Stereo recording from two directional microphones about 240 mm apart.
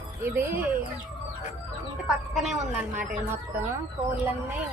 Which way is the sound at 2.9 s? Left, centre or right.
Right.